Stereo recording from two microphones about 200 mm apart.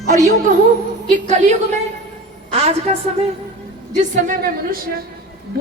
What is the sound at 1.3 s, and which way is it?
Speech, 35° right (ahead or behind).